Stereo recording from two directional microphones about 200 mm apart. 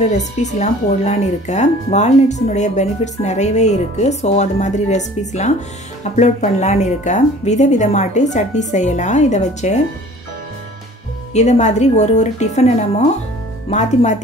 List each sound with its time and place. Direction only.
0.2 s speech: 35° left (ahead or behind)
6.1 s speech: 35° left (ahead or behind)
11.3 s speech: 35° left (ahead or behind)